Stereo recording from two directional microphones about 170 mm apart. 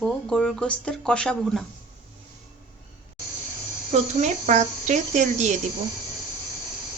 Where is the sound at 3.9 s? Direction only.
40° right (ahead or behind).